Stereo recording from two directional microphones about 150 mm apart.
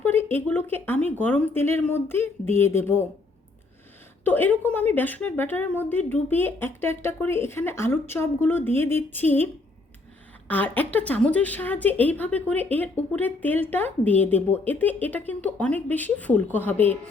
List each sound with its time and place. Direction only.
0.0 s a woman's voice: 15° left (ahead or behind)
4.2 s a woman's voice: 10° left (ahead or behind)
10.5 s a woman's voice: 10° left (ahead or behind)